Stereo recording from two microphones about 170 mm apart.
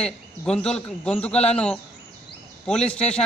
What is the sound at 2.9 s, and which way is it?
Speech, 5° left (ahead or behind).